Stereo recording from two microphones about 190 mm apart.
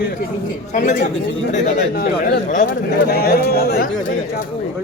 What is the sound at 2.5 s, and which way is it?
A man's voice, 45° left (ahead or behind).